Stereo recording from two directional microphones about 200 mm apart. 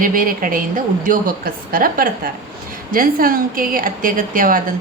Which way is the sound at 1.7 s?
45° right (ahead or behind).